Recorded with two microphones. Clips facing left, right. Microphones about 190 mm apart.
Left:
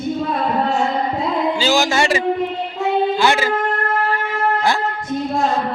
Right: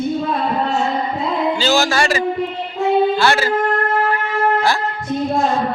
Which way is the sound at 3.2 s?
15° left (ahead or behind).